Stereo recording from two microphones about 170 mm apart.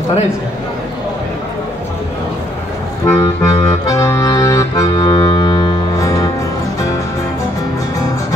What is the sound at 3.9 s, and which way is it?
Accordion, 15° left (ahead or behind).